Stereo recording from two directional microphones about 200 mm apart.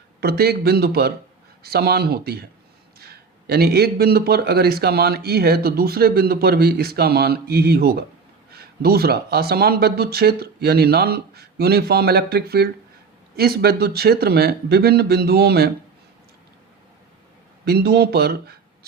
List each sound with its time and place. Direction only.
0.2 s a man's voice: 50° right (ahead or behind)
17.7 s speech: 55° right (ahead or behind)